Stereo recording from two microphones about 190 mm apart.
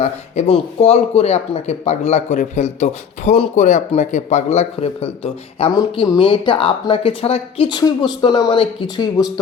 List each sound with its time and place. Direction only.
0.0 s speech: 35° left (ahead or behind)